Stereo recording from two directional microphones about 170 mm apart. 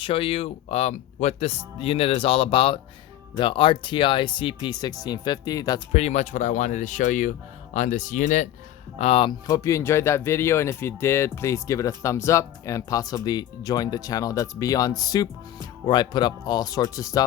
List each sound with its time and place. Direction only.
0.0 s speech: 30° left (ahead or behind)
5.9 s speech: 40° left (ahead or behind)
9.0 s speech: 35° left (ahead or behind)
9.5 s speech: 15° left (ahead or behind)